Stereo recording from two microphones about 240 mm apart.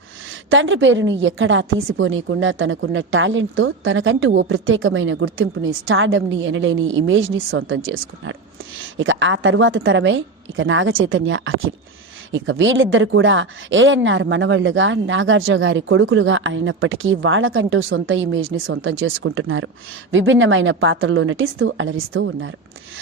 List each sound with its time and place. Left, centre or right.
0.3 s speech: right